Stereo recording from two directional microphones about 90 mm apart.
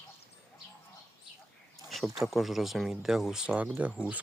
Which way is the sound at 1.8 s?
Centre (ahead or behind).